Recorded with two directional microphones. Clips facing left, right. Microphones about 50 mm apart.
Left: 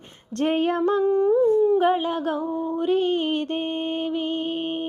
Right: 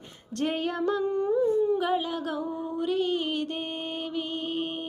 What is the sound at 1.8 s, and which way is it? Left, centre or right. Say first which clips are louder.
Humming: left 6 dB; left.